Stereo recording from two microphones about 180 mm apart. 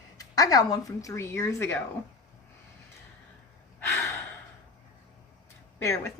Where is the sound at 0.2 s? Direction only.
20° left (ahead or behind).